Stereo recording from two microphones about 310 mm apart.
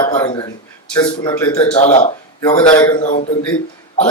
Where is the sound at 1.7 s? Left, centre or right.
Left.